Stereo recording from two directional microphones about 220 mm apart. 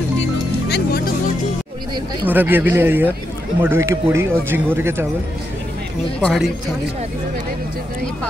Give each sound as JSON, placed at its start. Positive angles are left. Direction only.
{"t": 0.7, "sound": "music", "side_deg": 45}
{"t": 2.2, "sound": "speech", "side_deg": -10}
{"t": 6.2, "sound": "a man's voice", "side_deg": 0}